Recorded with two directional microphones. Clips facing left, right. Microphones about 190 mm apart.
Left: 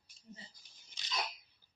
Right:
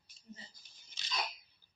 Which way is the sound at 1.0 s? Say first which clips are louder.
Right 1 dB; 15° left (ahead or behind).